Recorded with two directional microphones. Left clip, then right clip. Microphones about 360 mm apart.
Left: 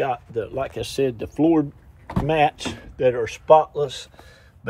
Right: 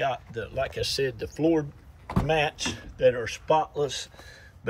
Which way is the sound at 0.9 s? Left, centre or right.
Left.